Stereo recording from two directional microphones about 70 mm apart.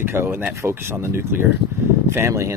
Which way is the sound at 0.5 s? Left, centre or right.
Right.